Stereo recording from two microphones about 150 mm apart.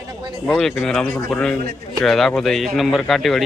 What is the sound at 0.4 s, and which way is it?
Speech, 5° left (ahead or behind).